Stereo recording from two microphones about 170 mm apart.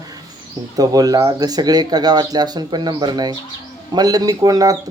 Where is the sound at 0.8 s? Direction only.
20° right (ahead or behind).